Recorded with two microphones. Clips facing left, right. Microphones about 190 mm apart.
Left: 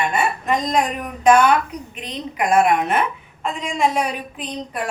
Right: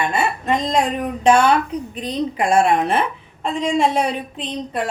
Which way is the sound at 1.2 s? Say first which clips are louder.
Even; 30° right (ahead or behind).